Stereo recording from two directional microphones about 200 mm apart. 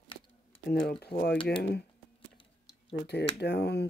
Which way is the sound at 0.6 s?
50° left (ahead or behind).